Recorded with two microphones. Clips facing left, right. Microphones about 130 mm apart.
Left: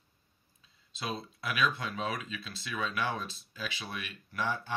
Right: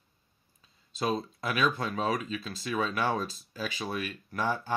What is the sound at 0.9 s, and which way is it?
Speech, 45° right (ahead or behind).